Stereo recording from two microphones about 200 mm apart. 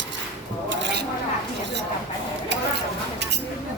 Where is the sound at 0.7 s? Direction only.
60° right (ahead or behind).